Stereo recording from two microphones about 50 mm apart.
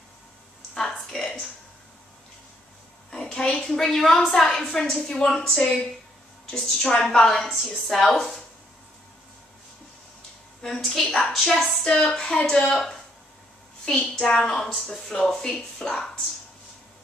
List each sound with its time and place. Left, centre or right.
0.7 s a sound: centre
3.1 s a woman's voice: centre
10.6 s a woman's voice: centre
11.8 s speech: centre